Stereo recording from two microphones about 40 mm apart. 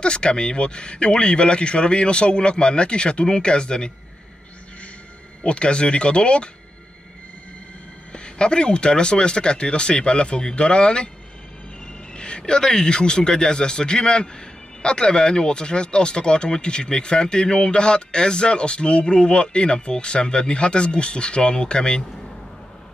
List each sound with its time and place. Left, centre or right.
0.0 s speech: left
5.4 s speech: left
8.1 s speech: left
12.2 s speech: left